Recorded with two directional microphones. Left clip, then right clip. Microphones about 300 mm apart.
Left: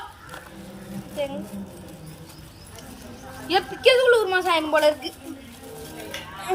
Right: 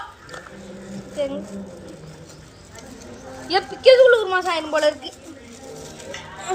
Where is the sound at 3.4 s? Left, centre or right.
Centre.